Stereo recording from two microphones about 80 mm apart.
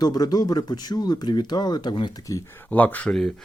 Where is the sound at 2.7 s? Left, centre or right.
Left.